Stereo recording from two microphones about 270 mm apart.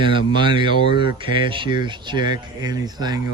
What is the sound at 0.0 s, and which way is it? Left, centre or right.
Speech, centre.